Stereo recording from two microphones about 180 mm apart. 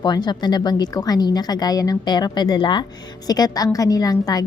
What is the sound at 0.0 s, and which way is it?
A woman's voice, 25° left (ahead or behind).